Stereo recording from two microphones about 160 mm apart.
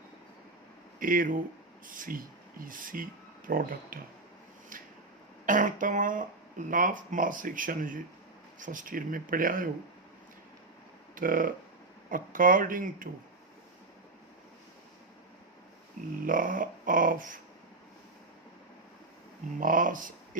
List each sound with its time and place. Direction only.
0.9 s speech: 60° right (ahead or behind)
4.7 s a sound: 60° right (ahead or behind)
5.5 s speech: 55° right (ahead or behind)
11.1 s speech: 60° right (ahead or behind)
16.2 s speech: 60° right (ahead or behind)
19.5 s speech: 55° right (ahead or behind)